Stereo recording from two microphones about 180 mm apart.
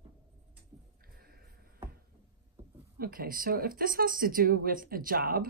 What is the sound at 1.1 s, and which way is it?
Music, 55° right (ahead or behind).